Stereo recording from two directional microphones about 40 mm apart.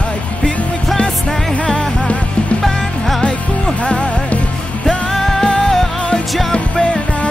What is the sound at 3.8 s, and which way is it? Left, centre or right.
Music, left.